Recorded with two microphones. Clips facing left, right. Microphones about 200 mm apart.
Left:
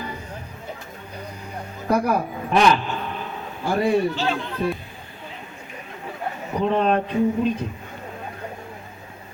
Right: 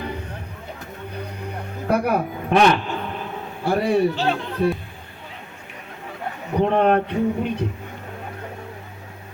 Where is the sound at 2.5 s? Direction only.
65° right (ahead or behind).